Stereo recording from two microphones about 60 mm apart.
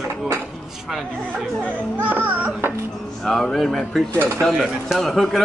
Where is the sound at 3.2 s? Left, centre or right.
Centre.